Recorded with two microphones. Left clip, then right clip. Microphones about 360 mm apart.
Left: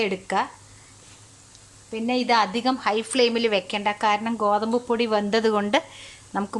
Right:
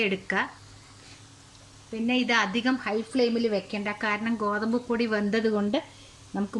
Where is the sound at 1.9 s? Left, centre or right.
Centre.